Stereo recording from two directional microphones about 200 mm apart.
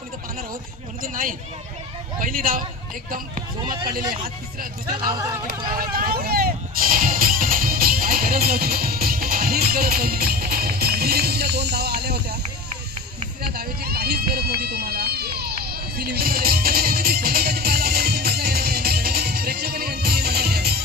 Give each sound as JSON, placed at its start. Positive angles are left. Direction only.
{"t": 1.0, "sound": "speech", "side_deg": -45}
{"t": 4.9, "sound": "speech", "side_deg": -20}
{"t": 5.8, "sound": "music", "side_deg": -50}
{"t": 13.5, "sound": "speech", "side_deg": -50}
{"t": 14.6, "sound": "a sound", "side_deg": -50}